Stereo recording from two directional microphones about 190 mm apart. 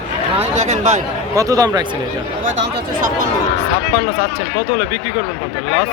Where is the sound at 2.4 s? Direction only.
70° right (ahead or behind).